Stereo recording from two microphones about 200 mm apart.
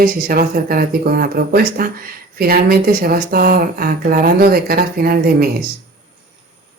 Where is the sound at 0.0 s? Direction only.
45° right (ahead or behind).